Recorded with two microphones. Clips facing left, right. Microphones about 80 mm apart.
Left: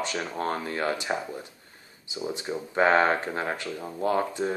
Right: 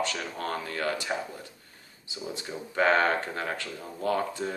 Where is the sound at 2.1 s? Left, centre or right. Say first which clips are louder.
Left 5 dB; centre.